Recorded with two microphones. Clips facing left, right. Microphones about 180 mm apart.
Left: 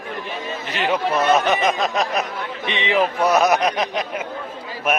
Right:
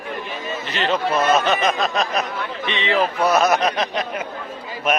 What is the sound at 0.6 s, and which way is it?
Speech, 10° left (ahead or behind).